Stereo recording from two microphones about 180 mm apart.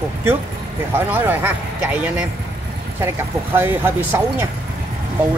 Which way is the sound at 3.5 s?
10° right (ahead or behind).